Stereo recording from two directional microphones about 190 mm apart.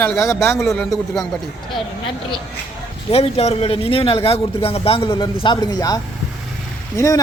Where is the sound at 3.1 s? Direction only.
30° left (ahead or behind).